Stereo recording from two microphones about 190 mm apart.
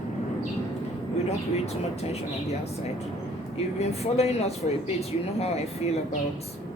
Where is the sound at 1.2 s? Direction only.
35° left (ahead or behind).